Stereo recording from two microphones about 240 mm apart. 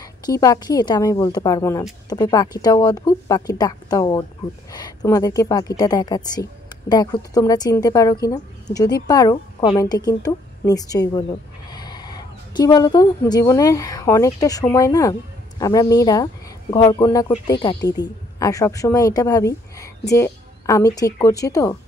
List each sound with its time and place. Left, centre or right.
0.2 s a woman's voice: centre
17.7 s a woman's voice: left
18.4 s a woman's voice: centre